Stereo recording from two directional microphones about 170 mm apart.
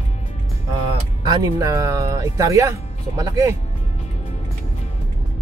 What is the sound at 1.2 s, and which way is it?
Speech, 20° right (ahead or behind).